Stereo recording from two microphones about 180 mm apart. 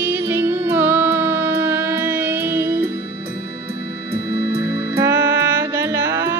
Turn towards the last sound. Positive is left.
turn(degrees=-15)  # may be behind; listen again after turning